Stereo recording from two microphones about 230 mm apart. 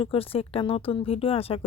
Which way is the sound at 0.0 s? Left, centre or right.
Left.